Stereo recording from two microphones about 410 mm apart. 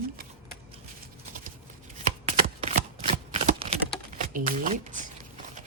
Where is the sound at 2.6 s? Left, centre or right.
Centre.